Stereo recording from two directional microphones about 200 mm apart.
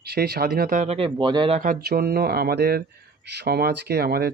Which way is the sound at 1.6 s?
45° right (ahead or behind).